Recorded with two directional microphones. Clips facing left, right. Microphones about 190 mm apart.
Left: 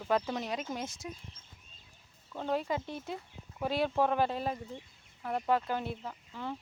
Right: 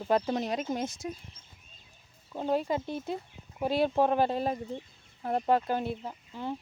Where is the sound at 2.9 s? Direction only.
30° right (ahead or behind).